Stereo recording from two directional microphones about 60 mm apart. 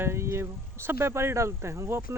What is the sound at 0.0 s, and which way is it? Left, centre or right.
Speech, right.